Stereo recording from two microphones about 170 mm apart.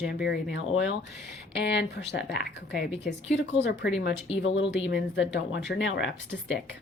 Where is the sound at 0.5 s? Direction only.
90° left.